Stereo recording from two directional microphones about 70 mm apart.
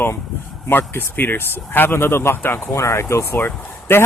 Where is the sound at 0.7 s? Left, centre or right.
Left.